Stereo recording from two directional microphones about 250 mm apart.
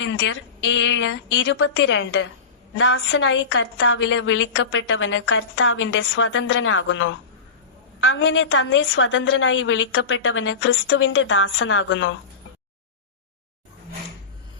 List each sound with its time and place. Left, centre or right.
0.0 s a woman's voice: left